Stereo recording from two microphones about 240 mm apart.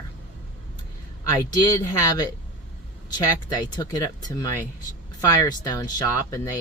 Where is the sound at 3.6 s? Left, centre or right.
Centre.